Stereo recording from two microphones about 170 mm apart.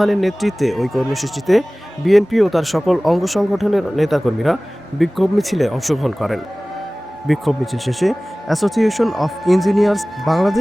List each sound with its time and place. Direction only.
0.0 s speech: centre (ahead or behind)